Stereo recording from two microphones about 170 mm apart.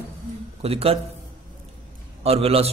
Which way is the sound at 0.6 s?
35° right (ahead or behind).